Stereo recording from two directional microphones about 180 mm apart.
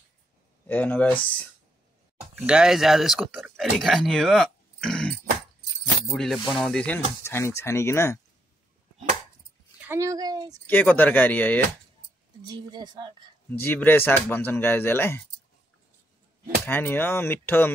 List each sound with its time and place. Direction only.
0.7 s speech: 10° left (ahead or behind)
2.3 s speech: 5° right (ahead or behind); by 8.2 s 15° left (ahead or behind)
9.8 s a woman's voice: 15° right (ahead or behind)
10.7 s speech: 10° left (ahead or behind)
12.4 s a woman's voice: 25° right (ahead or behind)
13.6 s speech: 10° left (ahead or behind)
16.6 s speech: 10° left (ahead or behind)